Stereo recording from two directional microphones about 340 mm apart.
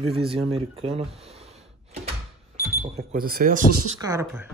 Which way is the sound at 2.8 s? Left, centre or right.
Centre.